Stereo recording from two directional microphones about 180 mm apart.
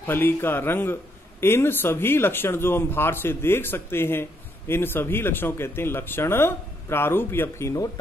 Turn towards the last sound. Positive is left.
turn(degrees=15)  # may be behind; listen again after turning